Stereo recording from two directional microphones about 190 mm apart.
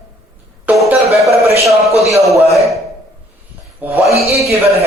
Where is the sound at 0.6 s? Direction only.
Centre (ahead or behind).